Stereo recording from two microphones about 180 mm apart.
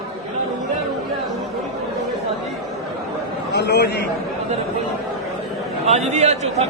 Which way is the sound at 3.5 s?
70° left (ahead or behind).